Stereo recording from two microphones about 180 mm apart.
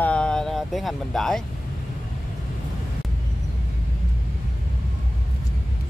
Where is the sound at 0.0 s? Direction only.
5° left (ahead or behind).